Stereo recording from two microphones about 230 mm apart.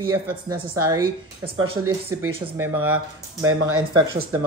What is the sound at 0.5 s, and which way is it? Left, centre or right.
Speech, right.